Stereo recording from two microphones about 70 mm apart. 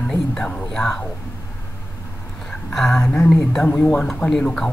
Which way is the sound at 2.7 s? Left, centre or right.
Centre.